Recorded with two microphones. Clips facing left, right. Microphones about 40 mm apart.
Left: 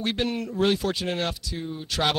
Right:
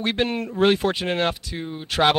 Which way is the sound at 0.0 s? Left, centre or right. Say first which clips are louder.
Right 3 dB; right.